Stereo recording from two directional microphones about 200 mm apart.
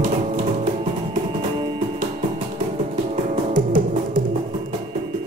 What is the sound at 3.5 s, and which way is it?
Music, 45° right (ahead or behind).